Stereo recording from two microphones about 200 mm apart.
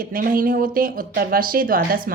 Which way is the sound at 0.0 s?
45° right (ahead or behind).